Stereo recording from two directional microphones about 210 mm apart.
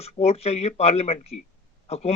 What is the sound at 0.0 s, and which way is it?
Speech, 30° left (ahead or behind).